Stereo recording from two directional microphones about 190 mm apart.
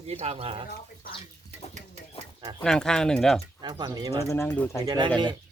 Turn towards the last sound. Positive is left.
turn(degrees=-20)  # may be behind; listen again after turning